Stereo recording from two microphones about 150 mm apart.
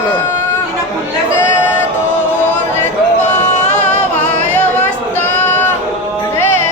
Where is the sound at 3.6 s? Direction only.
50° left (ahead or behind).